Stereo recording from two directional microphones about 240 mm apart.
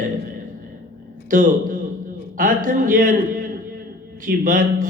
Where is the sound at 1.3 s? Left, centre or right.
Right.